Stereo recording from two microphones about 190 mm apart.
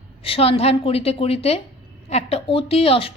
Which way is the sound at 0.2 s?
30° left (ahead or behind).